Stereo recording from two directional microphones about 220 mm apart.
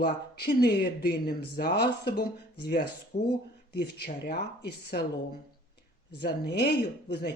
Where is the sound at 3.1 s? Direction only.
30° left (ahead or behind).